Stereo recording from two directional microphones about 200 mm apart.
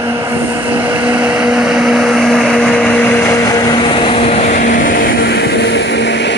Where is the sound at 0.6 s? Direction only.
10° right (ahead or behind).